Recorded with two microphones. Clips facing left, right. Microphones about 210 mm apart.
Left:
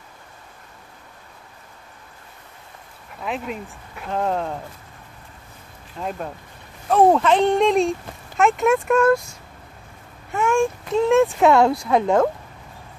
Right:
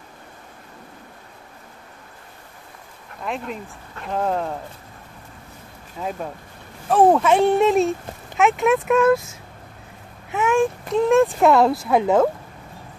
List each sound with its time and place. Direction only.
3.2 s speech: centre (ahead or behind)
5.9 s speech: 5° right (ahead or behind)